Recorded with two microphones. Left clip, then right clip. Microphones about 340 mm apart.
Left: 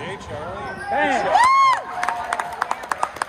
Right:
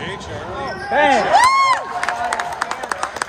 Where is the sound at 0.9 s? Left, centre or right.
Right.